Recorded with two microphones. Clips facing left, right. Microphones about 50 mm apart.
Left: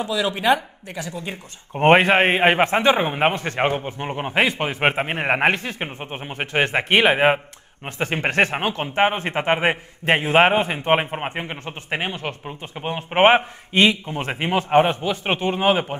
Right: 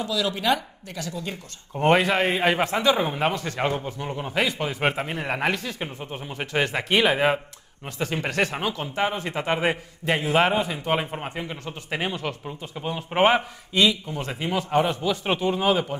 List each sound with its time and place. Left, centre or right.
0.0 s speech: left
1.8 s speech: left